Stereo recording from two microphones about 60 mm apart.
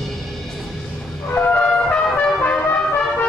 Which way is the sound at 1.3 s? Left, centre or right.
Left.